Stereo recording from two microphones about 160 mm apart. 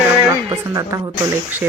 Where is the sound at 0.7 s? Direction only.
20° right (ahead or behind).